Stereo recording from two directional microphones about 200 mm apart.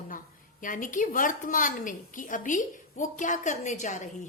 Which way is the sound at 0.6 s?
40° left (ahead or behind).